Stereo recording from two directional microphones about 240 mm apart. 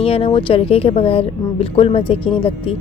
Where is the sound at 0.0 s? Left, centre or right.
Left.